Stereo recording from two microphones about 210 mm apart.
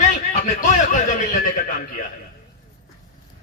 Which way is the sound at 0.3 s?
40° left (ahead or behind).